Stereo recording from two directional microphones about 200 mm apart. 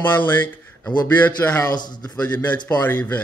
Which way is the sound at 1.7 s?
20° left (ahead or behind).